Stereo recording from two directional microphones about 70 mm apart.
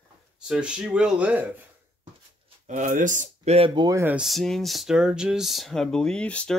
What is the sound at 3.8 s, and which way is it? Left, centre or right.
Speech, right.